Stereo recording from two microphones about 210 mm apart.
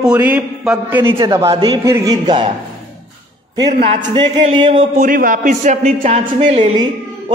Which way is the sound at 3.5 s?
20° right (ahead or behind).